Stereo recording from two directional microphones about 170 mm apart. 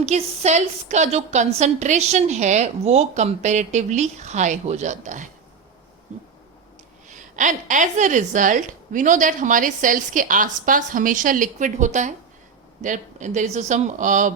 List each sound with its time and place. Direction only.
0.0 s a woman's voice: 40° right (ahead or behind)
7.1 s a woman's voice: 50° right (ahead or behind)